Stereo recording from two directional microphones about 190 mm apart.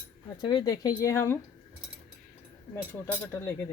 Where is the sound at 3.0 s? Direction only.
10° left (ahead or behind).